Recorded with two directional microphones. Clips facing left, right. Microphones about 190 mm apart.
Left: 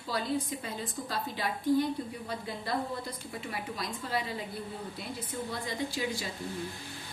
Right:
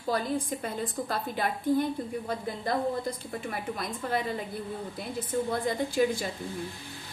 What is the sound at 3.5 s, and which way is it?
Speech, 50° right (ahead or behind).